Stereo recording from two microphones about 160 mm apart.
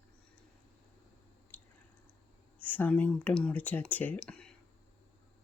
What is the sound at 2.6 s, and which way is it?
Speech, 10° left (ahead or behind).